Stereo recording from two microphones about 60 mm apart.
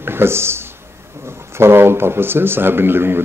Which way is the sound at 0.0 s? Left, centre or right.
Right.